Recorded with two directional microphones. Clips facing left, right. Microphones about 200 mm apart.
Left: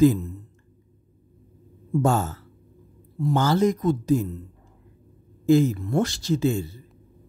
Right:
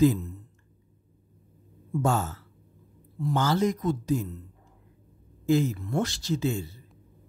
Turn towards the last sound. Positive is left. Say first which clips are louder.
# left 5 dB
turn(degrees=45)  # may be behind; listen again after turning